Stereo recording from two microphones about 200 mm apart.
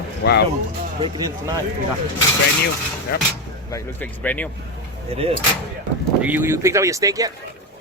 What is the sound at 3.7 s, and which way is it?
Speech, 10° left (ahead or behind).